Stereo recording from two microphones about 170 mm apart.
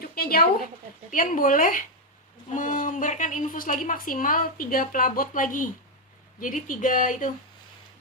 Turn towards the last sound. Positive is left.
turn(degrees=50)  # may be behind; listen again after turning